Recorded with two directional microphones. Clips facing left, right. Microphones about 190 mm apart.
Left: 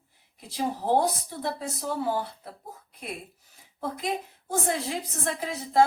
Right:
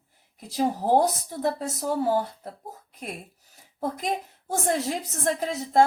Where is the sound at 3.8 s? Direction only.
40° right (ahead or behind).